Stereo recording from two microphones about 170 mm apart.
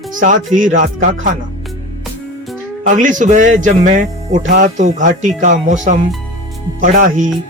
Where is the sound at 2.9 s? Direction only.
50° right (ahead or behind).